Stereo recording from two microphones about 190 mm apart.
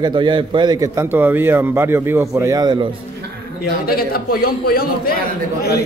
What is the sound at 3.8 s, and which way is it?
A man's voice, 50° left (ahead or behind).